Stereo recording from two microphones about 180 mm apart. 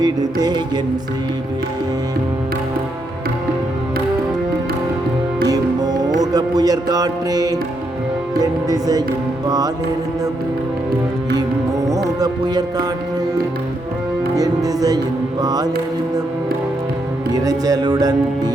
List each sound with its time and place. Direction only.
0.0 s music: 20° right (ahead or behind)
5.5 s music: 20° right (ahead or behind)
8.4 s speech: 20° right (ahead or behind)
9.5 s music: 20° right (ahead or behind)
12.2 s music: 20° right (ahead or behind)
14.3 s music: 20° right (ahead or behind)
17.3 s music: 20° right (ahead or behind)